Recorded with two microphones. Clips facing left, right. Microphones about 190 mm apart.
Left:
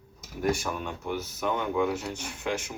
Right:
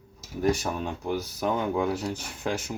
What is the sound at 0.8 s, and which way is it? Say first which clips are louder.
Speech: right 3 dB; 35° right (ahead or behind).